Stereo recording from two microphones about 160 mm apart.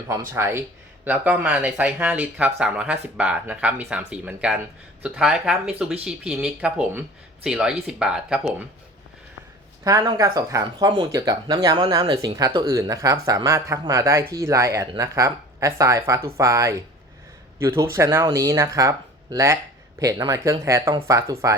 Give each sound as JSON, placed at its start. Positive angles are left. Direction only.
{"t": 0.1, "sound": "speech", "side_deg": -15}
{"t": 9.8, "sound": "speech", "side_deg": -25}